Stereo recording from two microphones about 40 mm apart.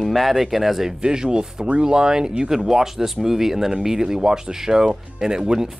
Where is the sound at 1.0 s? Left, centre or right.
Centre.